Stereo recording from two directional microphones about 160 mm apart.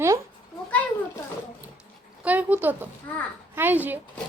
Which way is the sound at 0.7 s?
10° left (ahead or behind).